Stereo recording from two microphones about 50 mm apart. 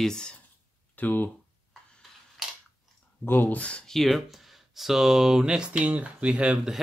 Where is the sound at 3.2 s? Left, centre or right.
Left.